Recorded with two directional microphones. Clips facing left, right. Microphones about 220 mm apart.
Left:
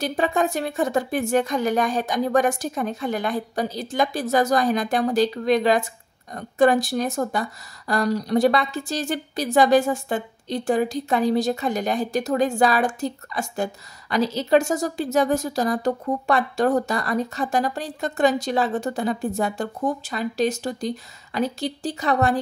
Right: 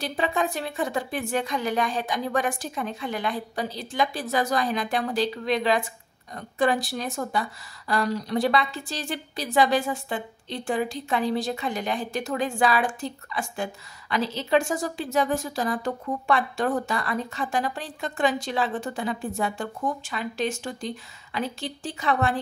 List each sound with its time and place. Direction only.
0.0 s a woman's voice: 45° left (ahead or behind)